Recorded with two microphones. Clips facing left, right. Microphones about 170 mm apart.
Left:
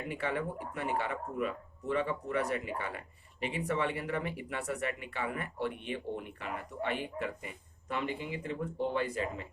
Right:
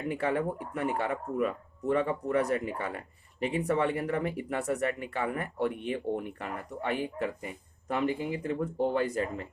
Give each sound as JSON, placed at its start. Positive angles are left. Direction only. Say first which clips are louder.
{"t": 0.1, "sound": "speech", "louder": "right 6 dB", "side_deg": -45}